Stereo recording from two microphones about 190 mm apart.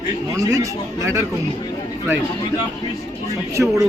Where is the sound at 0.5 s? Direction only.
15° right (ahead or behind).